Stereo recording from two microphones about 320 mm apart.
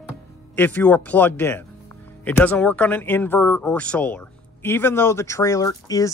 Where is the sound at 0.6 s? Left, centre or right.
Centre.